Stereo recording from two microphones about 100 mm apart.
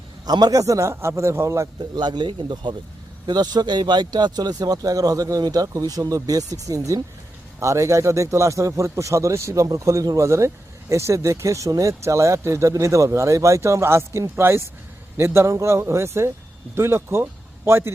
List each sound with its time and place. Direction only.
0.3 s speech: 45° right (ahead or behind)
1.8 s a man's voice: 50° right (ahead or behind); by 17.9 s 25° right (ahead or behind)